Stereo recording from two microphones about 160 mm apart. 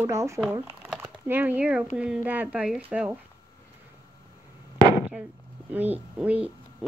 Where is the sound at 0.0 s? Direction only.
15° right (ahead or behind).